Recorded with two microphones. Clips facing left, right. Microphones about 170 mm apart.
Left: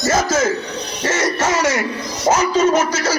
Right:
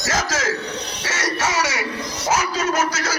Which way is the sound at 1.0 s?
55° left (ahead or behind).